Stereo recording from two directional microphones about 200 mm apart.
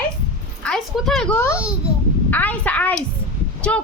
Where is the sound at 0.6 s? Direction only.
Centre (ahead or behind).